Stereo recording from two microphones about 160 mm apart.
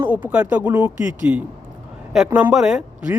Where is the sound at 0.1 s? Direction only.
10° right (ahead or behind).